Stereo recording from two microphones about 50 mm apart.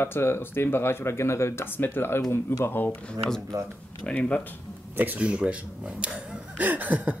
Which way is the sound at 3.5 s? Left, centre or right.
Right.